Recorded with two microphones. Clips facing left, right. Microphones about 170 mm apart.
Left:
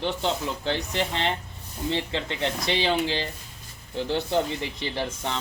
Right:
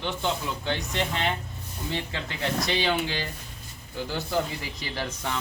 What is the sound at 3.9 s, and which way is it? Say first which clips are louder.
Speech: left 4 dB; 25° left (ahead or behind).